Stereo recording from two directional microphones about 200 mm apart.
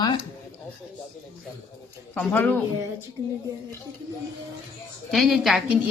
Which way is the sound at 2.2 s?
5° left (ahead or behind).